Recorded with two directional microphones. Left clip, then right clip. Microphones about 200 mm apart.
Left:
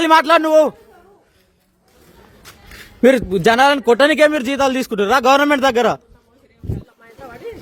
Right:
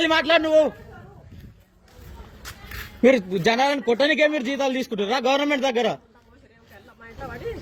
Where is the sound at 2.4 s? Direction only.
10° right (ahead or behind).